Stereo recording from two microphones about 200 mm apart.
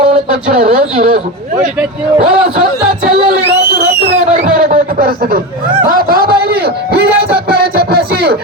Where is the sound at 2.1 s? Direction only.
40° right (ahead or behind).